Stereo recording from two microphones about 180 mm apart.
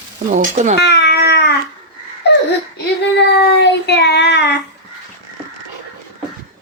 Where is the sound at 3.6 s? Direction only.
70° left (ahead or behind).